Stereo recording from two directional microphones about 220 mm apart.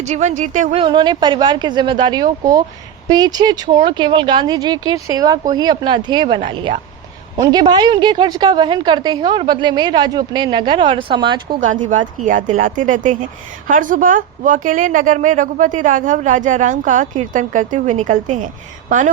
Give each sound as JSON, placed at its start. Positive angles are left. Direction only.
{"t": 0.0, "sound": "a woman's voice", "side_deg": -30}
{"t": 0.8, "sound": "a woman's voice", "side_deg": -20}
{"t": 12.2, "sound": "a woman's voice", "side_deg": -35}